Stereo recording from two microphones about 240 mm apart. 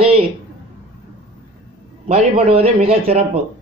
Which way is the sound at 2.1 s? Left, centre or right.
Right.